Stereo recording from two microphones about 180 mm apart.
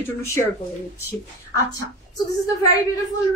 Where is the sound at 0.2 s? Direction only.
15° left (ahead or behind).